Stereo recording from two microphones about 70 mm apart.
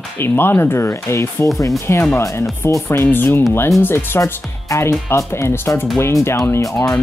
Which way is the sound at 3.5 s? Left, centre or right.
Left.